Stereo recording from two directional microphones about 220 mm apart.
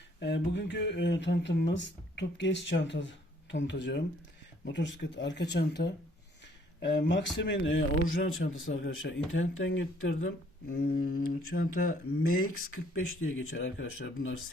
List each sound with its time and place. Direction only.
0.2 s a man's voice: 50° left (ahead or behind)
10.7 s speech: 40° left (ahead or behind)
12.7 s a man's voice: 65° left (ahead or behind)